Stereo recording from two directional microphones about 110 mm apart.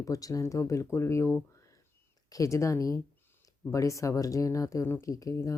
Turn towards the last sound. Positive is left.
turn(degrees=30)  # may be behind; listen again after turning